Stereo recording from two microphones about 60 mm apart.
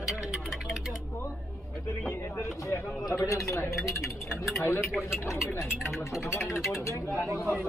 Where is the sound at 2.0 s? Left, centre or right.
Left.